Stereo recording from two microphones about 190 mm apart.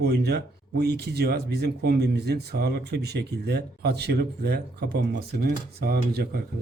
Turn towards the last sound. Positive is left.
turn(degrees=-55)  # may be behind; listen again after turning